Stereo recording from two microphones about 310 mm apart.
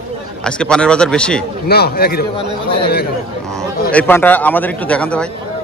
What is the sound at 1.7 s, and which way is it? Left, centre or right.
Speech, left.